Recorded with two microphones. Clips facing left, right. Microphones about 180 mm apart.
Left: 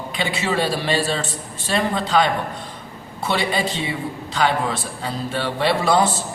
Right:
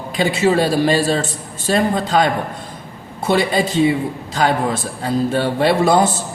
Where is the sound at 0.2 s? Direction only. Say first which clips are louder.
Right 7 dB; 45° right (ahead or behind).